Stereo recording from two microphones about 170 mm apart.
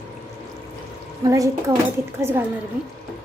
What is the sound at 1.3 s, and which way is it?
A woman's voice, 20° right (ahead or behind).